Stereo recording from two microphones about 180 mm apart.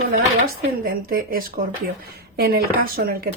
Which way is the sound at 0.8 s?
55° right (ahead or behind).